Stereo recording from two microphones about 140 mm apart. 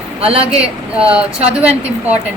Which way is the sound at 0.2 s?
40° right (ahead or behind).